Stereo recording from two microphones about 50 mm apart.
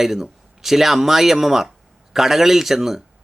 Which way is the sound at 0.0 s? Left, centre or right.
Centre.